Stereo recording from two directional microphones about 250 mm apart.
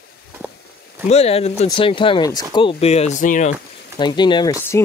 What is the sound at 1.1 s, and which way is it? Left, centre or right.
Speech, left.